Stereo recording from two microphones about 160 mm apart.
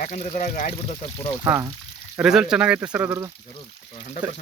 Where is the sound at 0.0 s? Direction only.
50° left (ahead or behind).